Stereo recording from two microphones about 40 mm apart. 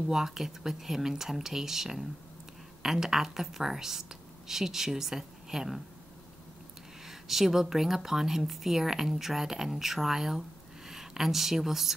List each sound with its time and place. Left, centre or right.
0.0 s a woman's voice: centre
7.1 s a woman's voice: centre